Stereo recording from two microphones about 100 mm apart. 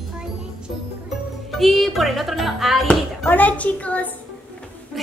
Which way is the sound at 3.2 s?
15° left (ahead or behind).